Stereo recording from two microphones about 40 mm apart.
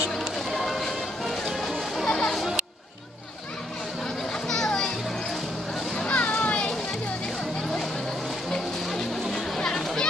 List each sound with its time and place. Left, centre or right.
0.2 s a sound: centre
2.1 s music: centre
4.3 s children playing: centre
6.0 s children playing: left
8.5 s music: centre
9.6 s a sound: centre